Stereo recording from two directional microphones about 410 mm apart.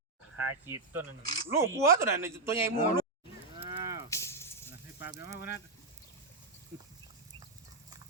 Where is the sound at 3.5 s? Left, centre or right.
Centre.